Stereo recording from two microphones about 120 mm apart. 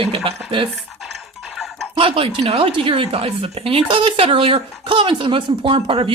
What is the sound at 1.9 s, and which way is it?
A woman's voice, 50° right (ahead or behind).